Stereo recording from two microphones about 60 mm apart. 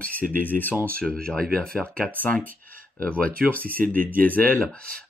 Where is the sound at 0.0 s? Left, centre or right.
Left.